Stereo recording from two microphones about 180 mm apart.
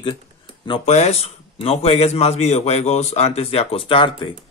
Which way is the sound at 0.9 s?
35° left (ahead or behind).